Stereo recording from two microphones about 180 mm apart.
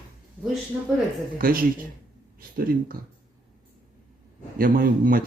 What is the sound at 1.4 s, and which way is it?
A man's voice, 55° right (ahead or behind).